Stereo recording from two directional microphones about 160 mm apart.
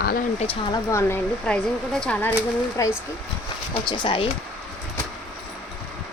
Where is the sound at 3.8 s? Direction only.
30° left (ahead or behind).